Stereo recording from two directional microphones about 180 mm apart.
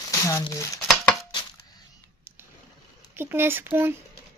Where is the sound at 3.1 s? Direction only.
10° right (ahead or behind).